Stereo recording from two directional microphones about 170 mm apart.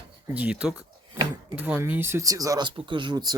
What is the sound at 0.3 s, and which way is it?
Speech, 10° right (ahead or behind).